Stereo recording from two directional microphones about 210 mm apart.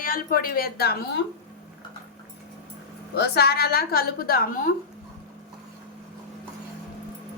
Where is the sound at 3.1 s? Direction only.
50° left (ahead or behind).